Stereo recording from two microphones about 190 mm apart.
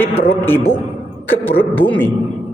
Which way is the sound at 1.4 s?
10° left (ahead or behind).